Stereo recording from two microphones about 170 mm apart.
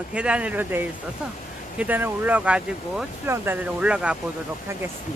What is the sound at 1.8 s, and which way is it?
Speech, 10° right (ahead or behind).